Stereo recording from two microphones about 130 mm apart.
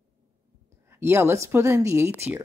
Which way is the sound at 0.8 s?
20° right (ahead or behind).